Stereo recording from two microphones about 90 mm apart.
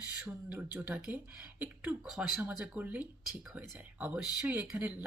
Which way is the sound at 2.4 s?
15° right (ahead or behind).